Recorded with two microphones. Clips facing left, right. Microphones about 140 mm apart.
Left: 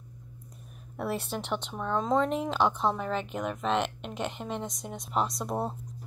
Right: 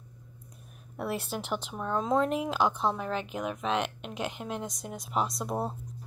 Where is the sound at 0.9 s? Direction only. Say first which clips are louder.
Left 1 dB; centre (ahead or behind).